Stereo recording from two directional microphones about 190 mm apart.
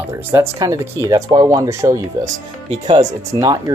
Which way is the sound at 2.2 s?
30° right (ahead or behind).